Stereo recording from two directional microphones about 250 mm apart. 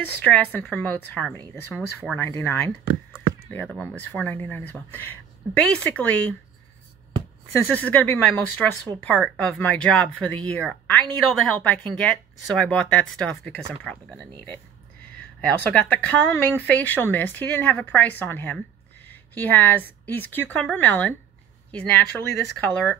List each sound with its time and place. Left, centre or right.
0.0 s speech: centre
1.7 s speech: centre
2.1 s speech: centre
7.5 s speech: centre
15.4 s a woman's voice: centre
22.6 s speech: centre